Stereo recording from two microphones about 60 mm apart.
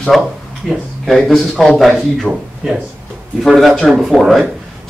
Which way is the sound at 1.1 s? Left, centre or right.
Centre.